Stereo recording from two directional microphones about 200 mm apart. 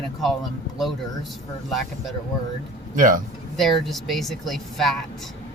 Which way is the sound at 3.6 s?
Centre (ahead or behind).